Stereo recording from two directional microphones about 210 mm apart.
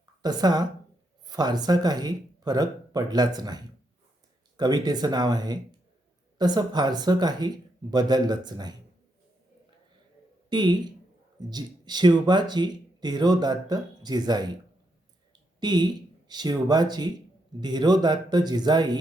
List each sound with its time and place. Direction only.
0.0 s a woman's voice: 20° right (ahead or behind)
10.5 s speech: 20° right (ahead or behind)
15.6 s speech: 20° right (ahead or behind)